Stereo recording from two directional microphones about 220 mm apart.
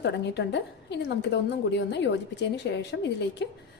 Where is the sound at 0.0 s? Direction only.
50° left (ahead or behind).